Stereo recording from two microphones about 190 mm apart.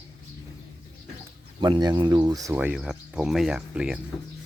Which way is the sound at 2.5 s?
5° right (ahead or behind).